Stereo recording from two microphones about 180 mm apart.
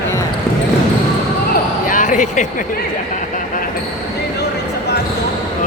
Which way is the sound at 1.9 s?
45° left (ahead or behind).